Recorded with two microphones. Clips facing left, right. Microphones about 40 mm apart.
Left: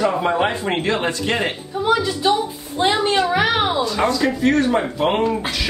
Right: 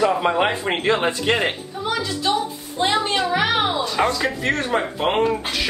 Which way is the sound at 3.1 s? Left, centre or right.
Centre.